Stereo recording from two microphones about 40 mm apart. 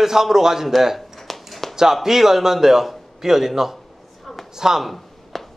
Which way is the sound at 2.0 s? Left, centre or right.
Centre.